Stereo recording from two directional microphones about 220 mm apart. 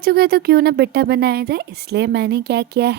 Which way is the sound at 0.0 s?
45° right (ahead or behind).